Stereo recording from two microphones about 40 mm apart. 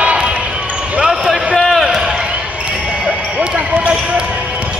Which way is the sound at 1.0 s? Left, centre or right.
Centre.